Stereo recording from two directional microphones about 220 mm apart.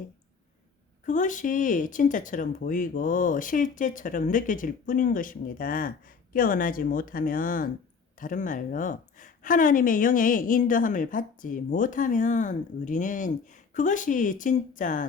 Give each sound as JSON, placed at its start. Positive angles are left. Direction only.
{"t": 1.0, "sound": "a woman's voice", "side_deg": 35}